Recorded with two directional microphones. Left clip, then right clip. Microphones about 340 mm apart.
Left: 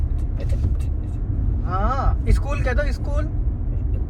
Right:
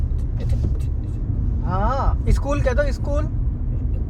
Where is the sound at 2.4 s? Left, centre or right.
Centre.